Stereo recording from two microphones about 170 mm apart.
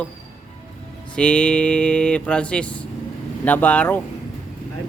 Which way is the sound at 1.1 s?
5° left (ahead or behind).